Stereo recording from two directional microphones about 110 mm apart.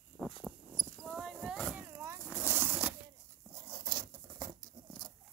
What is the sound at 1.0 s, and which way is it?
Cricket, centre (ahead or behind).